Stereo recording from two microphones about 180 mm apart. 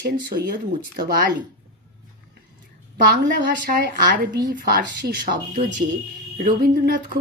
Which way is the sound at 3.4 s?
50° right (ahead or behind).